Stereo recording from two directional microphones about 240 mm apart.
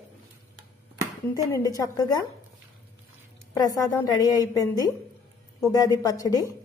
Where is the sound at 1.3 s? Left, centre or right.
Centre.